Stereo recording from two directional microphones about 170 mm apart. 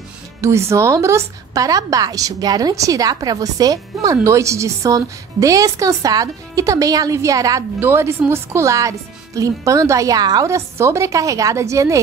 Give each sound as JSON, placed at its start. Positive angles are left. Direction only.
{"t": 0.4, "sound": "a woman's voice", "side_deg": -15}